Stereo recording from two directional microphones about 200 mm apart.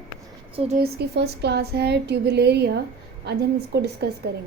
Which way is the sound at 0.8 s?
55° right (ahead or behind).